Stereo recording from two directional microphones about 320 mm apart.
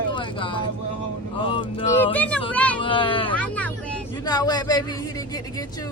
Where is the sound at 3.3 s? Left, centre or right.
Centre.